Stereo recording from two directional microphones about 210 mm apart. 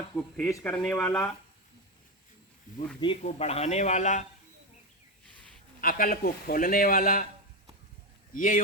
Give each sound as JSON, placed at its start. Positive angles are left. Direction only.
{"t": 0.2, "sound": "speech", "side_deg": 5}
{"t": 3.0, "sound": "speech", "side_deg": 30}
{"t": 5.8, "sound": "a man's voice", "side_deg": 40}
{"t": 8.3, "sound": "a man's voice", "side_deg": 40}